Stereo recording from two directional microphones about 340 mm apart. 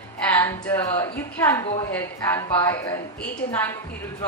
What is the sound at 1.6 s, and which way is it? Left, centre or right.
A woman's voice, centre.